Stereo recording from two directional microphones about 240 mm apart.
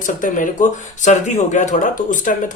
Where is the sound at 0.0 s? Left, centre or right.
Left.